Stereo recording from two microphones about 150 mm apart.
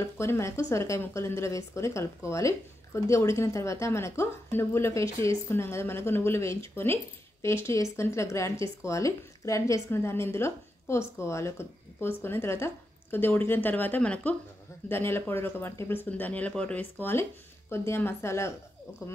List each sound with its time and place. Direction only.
0.0 s speech: 20° left (ahead or behind)